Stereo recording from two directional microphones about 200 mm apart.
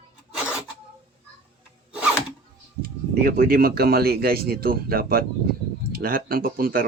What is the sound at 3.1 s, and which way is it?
Speech, 45° right (ahead or behind).